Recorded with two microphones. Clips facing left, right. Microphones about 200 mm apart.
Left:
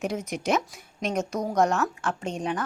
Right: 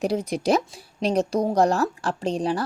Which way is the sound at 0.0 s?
35° right (ahead or behind).